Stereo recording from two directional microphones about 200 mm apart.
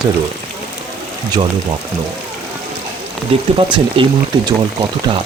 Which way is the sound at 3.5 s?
25° right (ahead or behind).